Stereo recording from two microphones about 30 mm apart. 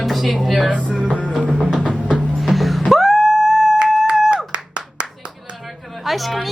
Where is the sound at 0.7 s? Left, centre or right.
Right.